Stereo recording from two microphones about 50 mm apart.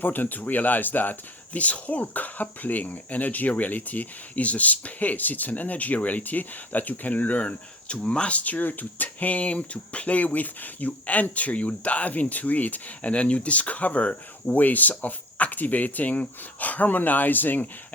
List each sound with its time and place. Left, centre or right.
0.0 s speech: left